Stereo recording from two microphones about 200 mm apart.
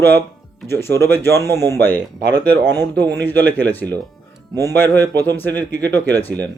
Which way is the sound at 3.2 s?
10° left (ahead or behind).